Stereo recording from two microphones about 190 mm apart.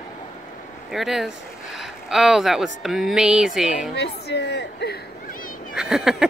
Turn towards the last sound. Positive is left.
turn(degrees=0)  # may be behind; listen again after turning